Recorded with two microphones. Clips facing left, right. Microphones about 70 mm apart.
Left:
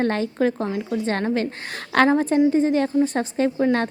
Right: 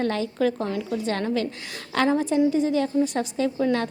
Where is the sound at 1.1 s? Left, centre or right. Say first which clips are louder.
Left 2 dB; left.